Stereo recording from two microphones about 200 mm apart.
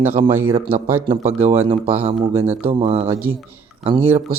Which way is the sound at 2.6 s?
30° right (ahead or behind).